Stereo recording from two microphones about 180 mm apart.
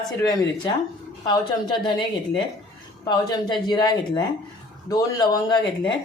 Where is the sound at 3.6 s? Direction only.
25° left (ahead or behind).